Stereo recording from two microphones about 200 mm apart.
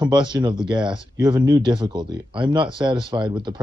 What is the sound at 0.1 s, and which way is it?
Speech, 25° right (ahead or behind).